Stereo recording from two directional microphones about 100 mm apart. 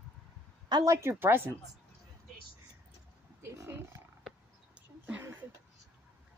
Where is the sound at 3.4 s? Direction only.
30° right (ahead or behind).